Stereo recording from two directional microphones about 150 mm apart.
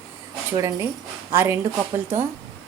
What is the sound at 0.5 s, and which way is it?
A woman's voice, 20° right (ahead or behind).